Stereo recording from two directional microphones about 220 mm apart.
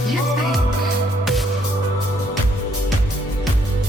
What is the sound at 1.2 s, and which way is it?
Music, centre (ahead or behind).